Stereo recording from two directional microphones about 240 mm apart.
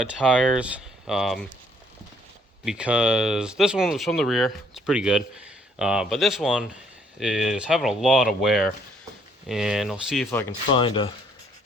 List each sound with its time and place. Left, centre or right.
0.0 s speech: centre
2.6 s speech: centre
10.8 s speech: left